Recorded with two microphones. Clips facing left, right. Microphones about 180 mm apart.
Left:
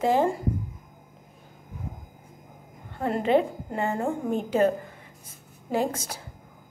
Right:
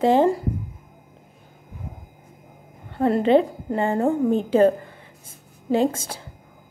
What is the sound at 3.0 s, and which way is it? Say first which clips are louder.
A woman's voice: right 5 dB; 35° right (ahead or behind).